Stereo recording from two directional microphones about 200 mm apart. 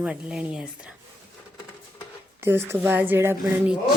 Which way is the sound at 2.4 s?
10° right (ahead or behind).